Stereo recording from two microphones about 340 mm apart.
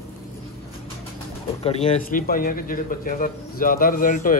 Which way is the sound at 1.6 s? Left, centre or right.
Centre.